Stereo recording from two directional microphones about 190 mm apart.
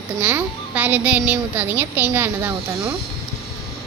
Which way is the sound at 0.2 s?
10° right (ahead or behind).